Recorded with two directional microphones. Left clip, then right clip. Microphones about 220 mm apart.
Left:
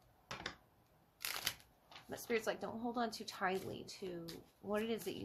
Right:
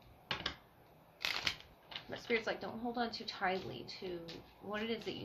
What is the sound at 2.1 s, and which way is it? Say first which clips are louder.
Speech: right 2 dB; 50° left (ahead or behind).